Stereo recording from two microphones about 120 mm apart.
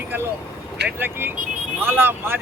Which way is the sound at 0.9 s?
15° right (ahead or behind).